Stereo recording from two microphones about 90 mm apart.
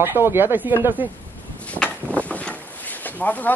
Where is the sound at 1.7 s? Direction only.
15° left (ahead or behind).